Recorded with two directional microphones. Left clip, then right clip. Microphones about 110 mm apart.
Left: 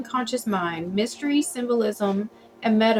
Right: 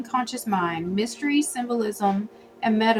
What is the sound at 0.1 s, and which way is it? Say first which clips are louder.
A woman's voice: even; 25° right (ahead or behind).